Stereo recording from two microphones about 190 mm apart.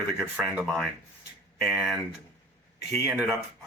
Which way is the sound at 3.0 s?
5° right (ahead or behind).